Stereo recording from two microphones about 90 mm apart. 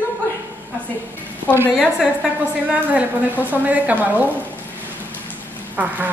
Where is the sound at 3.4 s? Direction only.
20° right (ahead or behind).